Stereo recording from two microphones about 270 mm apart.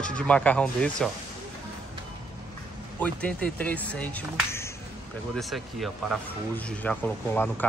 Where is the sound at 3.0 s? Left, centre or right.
Centre.